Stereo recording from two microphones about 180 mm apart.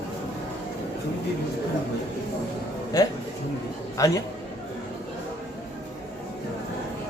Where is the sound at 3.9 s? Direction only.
20° left (ahead or behind).